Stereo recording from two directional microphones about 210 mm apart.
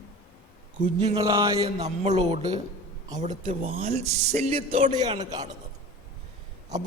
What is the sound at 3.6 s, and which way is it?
A man's voice, 25° right (ahead or behind).